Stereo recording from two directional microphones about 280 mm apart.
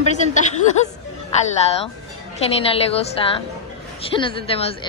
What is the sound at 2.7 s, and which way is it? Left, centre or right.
A woman's voice, centre.